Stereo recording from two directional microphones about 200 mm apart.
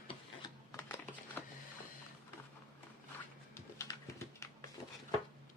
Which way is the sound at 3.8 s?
15° left (ahead or behind).